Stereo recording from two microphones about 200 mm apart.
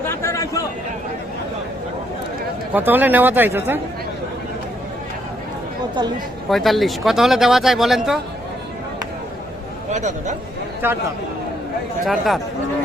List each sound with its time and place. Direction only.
0.1 s chatter: 15° left (ahead or behind)
2.7 s speech: 10° right (ahead or behind)
6.5 s speech: centre (ahead or behind)
9.9 s speech: 35° right (ahead or behind)
10.8 s speech: 10° right (ahead or behind)
12.0 s speech: centre (ahead or behind)